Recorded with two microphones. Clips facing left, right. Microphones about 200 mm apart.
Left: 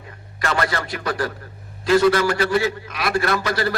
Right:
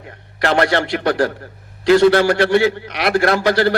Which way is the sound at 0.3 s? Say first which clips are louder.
Right 7 dB; 70° right (ahead or behind).